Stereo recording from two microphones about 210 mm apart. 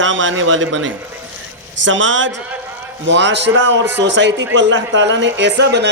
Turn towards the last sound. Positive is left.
turn(degrees=-55)  # may be behind; listen again after turning